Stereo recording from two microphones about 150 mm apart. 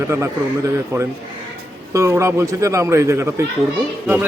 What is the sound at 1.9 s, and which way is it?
A man's voice, 20° right (ahead or behind).